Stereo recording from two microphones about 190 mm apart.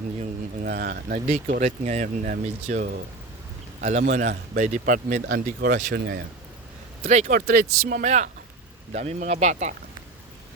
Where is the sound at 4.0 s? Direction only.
45° right (ahead or behind).